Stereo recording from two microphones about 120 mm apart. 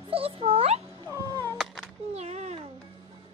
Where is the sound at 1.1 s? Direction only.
20° left (ahead or behind).